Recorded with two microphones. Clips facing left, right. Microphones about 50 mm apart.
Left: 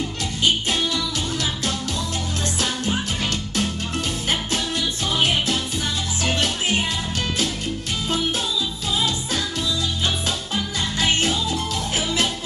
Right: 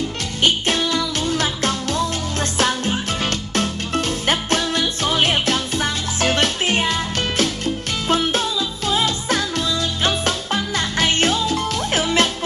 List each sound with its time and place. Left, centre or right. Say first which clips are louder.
0.4 s music: right 3 dB; right
3.3 s music: right 3 dB; right